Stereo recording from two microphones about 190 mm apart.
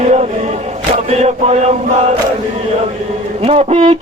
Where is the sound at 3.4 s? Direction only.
35° right (ahead or behind).